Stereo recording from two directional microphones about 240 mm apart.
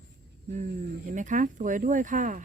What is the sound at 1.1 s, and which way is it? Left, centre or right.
Speech, right.